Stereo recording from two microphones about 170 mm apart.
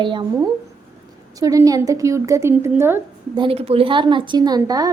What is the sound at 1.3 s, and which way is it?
A woman's voice, 20° right (ahead or behind).